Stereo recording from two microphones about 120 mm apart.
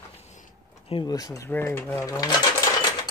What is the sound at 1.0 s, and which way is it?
Speech, 30° left (ahead or behind).